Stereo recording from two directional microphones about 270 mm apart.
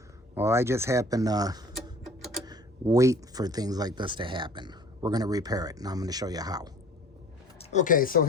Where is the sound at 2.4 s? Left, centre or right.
Centre.